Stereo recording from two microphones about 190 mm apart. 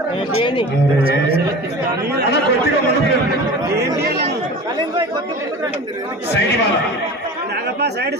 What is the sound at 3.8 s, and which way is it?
Speech, 60° right (ahead or behind).